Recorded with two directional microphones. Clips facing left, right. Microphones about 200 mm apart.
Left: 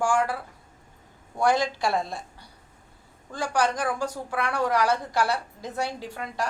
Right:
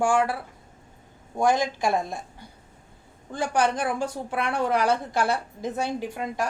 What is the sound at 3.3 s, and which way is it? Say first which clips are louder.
A woman's voice: right 2 dB; 20° right (ahead or behind).